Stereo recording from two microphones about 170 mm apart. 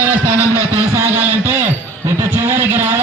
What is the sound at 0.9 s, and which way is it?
A man's voice, 15° right (ahead or behind).